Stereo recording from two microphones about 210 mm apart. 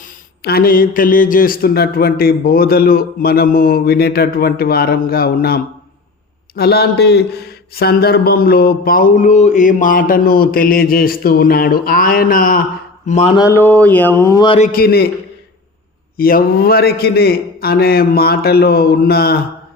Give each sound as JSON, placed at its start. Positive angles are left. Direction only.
{"t": 0.4, "sound": "speech", "side_deg": 45}
{"t": 13.1, "sound": "mantra", "side_deg": 30}
{"t": 13.3, "sound": "speech", "side_deg": 15}
{"t": 14.7, "sound": "speech", "side_deg": 45}
{"t": 16.1, "sound": "speech", "side_deg": 45}